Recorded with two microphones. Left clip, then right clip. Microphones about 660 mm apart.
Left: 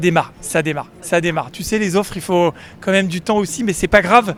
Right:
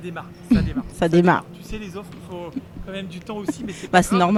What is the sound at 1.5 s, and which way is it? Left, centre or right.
Speech, left.